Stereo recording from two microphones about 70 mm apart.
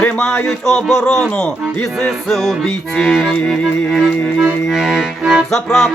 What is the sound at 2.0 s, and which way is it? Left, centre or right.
Music, centre.